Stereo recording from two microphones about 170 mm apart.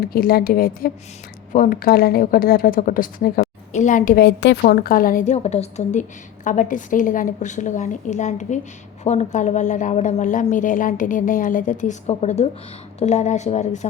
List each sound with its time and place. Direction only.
0.0 s speech: 60° left (ahead or behind)
3.7 s a woman's voice: 45° left (ahead or behind)